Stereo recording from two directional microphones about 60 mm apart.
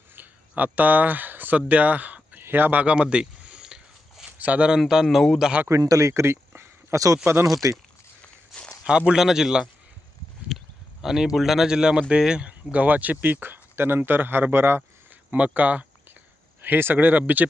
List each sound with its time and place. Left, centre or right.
0.2 s a sound: right
2.4 s a man's voice: right
2.8 s a sound: centre
4.3 s speech: right
4.8 s speech: centre
5.0 s a man's voice: centre
5.6 s speech: right
6.9 s speech: right
8.8 s speech: centre
10.5 s a sound: centre
11.0 s speech: centre
12.7 s speech: right
15.3 s speech: right